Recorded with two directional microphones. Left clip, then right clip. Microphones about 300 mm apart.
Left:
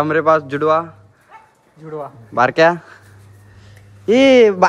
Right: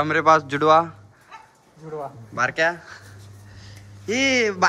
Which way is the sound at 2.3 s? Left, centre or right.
Centre.